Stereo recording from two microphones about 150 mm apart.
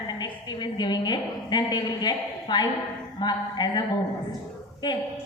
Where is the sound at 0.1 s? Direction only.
30° left (ahead or behind).